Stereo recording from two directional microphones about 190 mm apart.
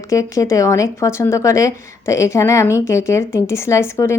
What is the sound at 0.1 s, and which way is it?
Speech, 15° left (ahead or behind).